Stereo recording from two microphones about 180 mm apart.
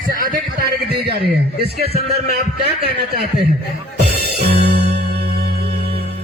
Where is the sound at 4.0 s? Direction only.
60° right (ahead or behind).